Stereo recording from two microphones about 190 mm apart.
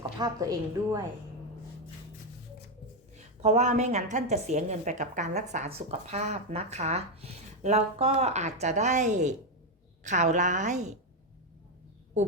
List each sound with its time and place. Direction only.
0.2 s a woman's voice: 20° right (ahead or behind)
3.2 s a woman's voice: 35° right (ahead or behind)